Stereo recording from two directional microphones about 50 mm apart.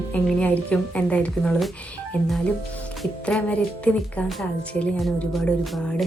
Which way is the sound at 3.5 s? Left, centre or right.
Left.